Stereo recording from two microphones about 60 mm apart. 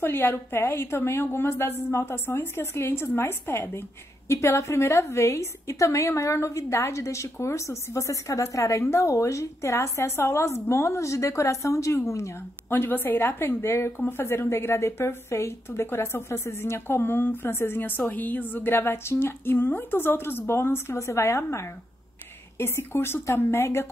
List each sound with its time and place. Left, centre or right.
0.0 s a woman's voice: left
12.6 s a woman's voice: left